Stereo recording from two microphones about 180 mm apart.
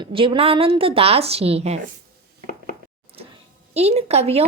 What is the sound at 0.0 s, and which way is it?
Speech, 30° right (ahead or behind).